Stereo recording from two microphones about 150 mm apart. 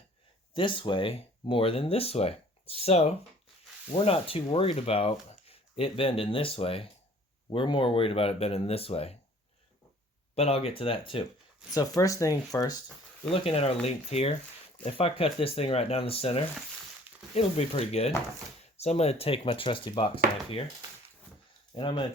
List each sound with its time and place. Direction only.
0.5 s speech: 35° left (ahead or behind)
10.3 s speech: 45° left (ahead or behind)
11.9 s speech: 20° left (ahead or behind)
13.3 s speech: 40° left (ahead or behind)
21.8 s speech: 35° left (ahead or behind)